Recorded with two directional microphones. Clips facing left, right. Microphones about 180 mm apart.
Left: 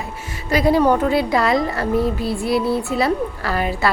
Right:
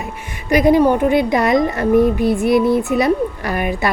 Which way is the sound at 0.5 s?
15° right (ahead or behind).